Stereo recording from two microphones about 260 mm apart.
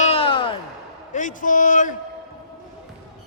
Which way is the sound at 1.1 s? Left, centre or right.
Left.